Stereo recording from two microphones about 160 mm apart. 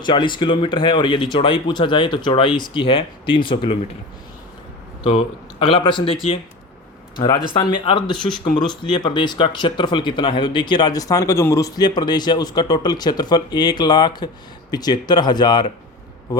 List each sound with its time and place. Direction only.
0.0 s speech: 30° left (ahead or behind)
5.0 s speech: 35° left (ahead or behind)
7.2 s speech: 30° left (ahead or behind)